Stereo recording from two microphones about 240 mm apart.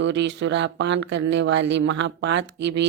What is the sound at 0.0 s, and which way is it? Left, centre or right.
Speech, right.